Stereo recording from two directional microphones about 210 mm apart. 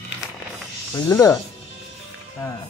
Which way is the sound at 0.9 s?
15° left (ahead or behind).